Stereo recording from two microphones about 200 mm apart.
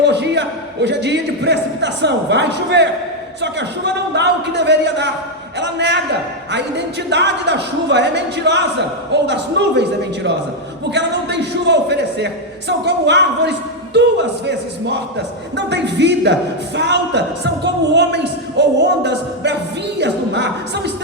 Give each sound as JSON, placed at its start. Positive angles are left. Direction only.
{"t": 0.1, "sound": "a man's voice", "side_deg": -60}
{"t": 10.9, "sound": "a man's voice", "side_deg": -60}
{"t": 15.5, "sound": "a man's voice", "side_deg": -60}